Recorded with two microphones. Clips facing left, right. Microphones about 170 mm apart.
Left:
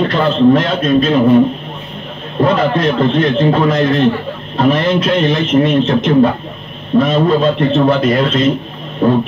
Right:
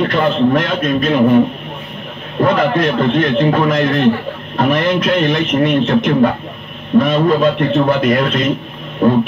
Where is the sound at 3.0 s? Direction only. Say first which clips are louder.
Left 1 dB; 25° left (ahead or behind).